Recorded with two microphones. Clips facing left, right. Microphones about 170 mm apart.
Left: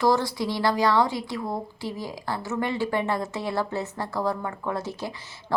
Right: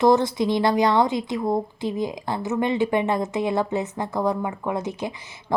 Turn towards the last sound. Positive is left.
turn(degrees=-20)  # may be behind; listen again after turning